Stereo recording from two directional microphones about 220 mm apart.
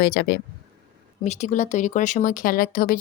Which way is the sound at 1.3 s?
30° left (ahead or behind).